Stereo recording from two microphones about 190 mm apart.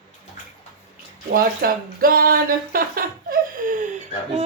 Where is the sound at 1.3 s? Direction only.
50° right (ahead or behind).